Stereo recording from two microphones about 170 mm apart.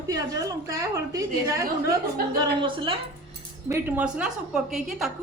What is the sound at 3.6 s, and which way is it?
A woman's voice, 10° right (ahead or behind).